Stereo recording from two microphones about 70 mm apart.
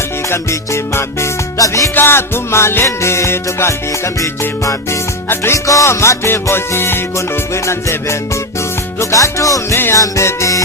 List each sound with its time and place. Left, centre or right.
0.3 s music: left
1.5 s music: left
2.0 s music: left